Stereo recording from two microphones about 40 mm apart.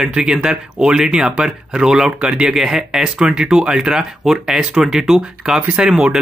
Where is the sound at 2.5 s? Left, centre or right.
Centre.